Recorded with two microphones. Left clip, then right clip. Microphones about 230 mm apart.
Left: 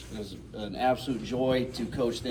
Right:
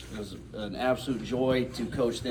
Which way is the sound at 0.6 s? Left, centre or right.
Centre.